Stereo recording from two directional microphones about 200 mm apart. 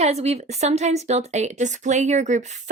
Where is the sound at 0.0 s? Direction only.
35° right (ahead or behind).